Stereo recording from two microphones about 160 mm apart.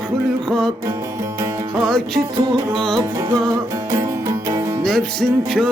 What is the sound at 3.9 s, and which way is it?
Music, 20° right (ahead or behind).